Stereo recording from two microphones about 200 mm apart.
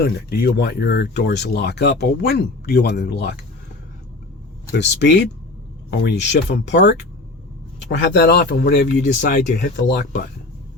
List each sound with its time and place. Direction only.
0.0 s speech: 50° left (ahead or behind)
4.7 s speech: 60° left (ahead or behind)